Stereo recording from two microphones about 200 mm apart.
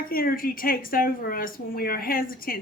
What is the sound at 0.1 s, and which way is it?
A man's voice, 45° left (ahead or behind).